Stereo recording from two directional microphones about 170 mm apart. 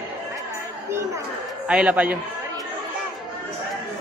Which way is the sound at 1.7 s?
5° right (ahead or behind).